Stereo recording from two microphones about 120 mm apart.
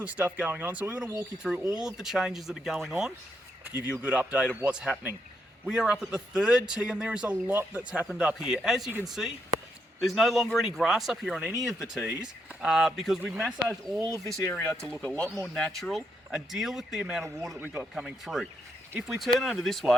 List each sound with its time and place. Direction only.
0.0 s a man's voice: 10° right (ahead or behind)
15.0 s speech: 10° left (ahead or behind)
17.2 s a man's voice: 25° right (ahead or behind)
17.9 s speech: centre (ahead or behind)